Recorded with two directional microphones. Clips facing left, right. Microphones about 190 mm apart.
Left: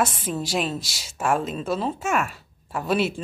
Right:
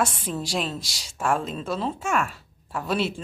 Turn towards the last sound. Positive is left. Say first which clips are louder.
# left 3 dB
turn(degrees=10)  # may be behind; listen again after turning